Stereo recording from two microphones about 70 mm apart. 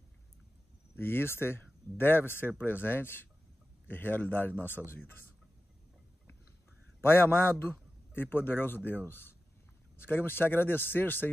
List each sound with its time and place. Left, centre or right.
0.9 s a man's voice: left
7.0 s a man's voice: left